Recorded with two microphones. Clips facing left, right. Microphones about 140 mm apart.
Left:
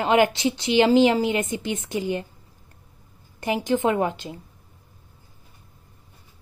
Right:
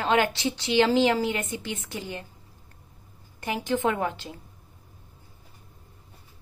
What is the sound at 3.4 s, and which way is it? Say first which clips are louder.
Speech: left 4 dB; 15° left (ahead or behind).